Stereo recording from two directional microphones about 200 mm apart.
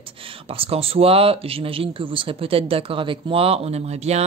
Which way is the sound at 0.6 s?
30° right (ahead or behind).